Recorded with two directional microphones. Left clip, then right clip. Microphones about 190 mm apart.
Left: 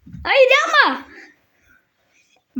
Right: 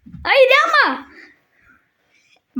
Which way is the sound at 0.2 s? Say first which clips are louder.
Right 1 dB; 5° right (ahead or behind).